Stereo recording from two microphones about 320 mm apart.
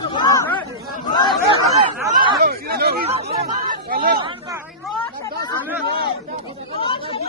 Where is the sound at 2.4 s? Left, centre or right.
Right.